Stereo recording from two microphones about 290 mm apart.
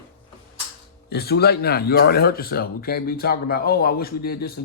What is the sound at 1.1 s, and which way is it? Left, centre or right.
Speech, left.